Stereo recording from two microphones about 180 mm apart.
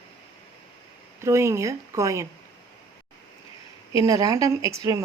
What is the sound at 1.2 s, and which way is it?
Speech, 15° right (ahead or behind).